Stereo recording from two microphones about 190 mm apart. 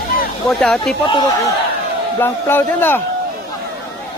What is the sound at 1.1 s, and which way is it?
Speech, 20° left (ahead or behind).